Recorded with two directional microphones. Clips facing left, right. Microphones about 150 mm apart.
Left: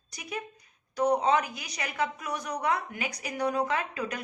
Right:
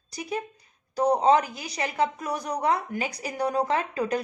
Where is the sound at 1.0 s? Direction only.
30° right (ahead or behind).